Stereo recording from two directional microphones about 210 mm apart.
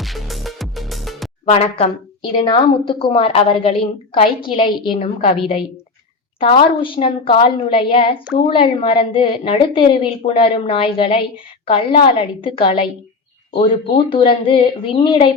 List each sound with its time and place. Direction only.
0.0 s music: centre (ahead or behind)
1.5 s a woman's voice: 30° left (ahead or behind)
14.1 s a woman's voice: 25° left (ahead or behind)